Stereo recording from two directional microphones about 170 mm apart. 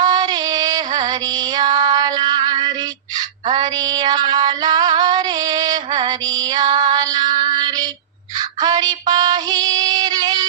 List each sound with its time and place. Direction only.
0.0 s music: 25° right (ahead or behind)
3.4 s female singing: 25° right (ahead or behind)